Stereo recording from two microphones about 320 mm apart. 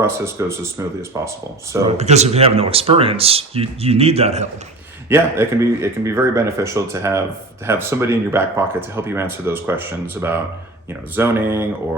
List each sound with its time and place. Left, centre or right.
0.0 s speech: centre
1.9 s speech: right
5.0 s speech: centre